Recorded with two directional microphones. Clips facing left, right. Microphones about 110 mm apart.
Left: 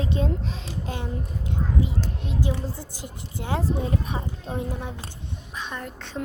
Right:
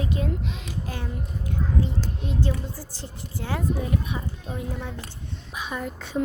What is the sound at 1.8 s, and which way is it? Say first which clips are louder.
Speech: even; 5° left (ahead or behind).